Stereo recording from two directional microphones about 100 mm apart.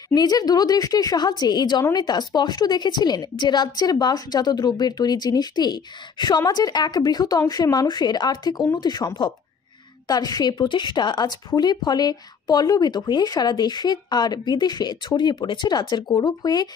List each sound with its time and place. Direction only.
0.1 s a woman's voice: 40° left (ahead or behind)
16.1 s speech: 40° left (ahead or behind)